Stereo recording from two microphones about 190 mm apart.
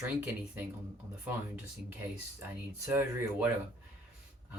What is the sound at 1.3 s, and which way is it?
Speech, 10° right (ahead or behind).